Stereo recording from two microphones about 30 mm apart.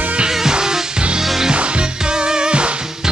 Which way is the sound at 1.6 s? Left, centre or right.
Right.